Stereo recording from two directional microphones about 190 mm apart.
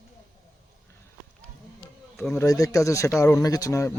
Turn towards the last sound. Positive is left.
turn(degrees=15)  # may be behind; listen again after turning